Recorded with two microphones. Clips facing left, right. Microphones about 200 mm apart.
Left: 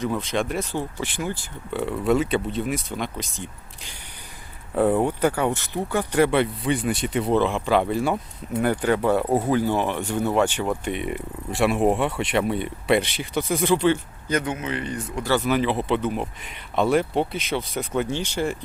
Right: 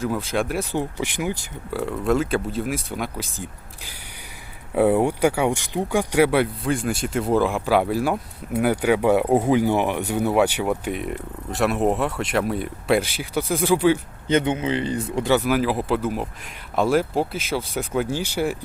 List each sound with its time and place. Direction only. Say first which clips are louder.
0.0 s speech: right 1 dB; 5° right (ahead or behind)
1.7 s speech: even; centre (ahead or behind)
4.7 s speech: right 2 dB; 10° right (ahead or behind)
14.3 s speech: right 5 dB; 25° right (ahead or behind)
15.3 s speech: right 1 dB; 10° right (ahead or behind)